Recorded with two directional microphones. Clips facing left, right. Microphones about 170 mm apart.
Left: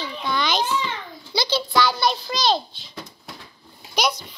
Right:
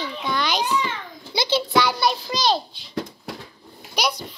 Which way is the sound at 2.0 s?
10° right (ahead or behind).